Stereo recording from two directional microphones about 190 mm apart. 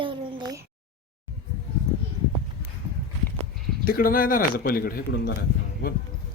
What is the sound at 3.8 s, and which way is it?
A man's voice, 50° left (ahead or behind).